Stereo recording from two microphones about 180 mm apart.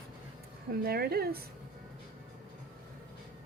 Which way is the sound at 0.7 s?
60° right (ahead or behind).